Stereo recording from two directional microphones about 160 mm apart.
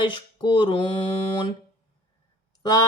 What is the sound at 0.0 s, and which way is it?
Mantra, 30° left (ahead or behind).